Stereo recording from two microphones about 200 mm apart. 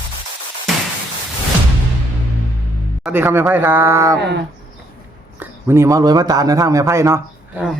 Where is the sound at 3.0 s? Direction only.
10° right (ahead or behind).